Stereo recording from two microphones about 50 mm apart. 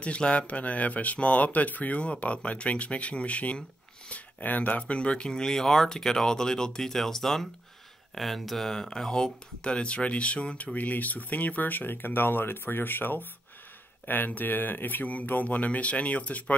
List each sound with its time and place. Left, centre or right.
0.0 s speech: left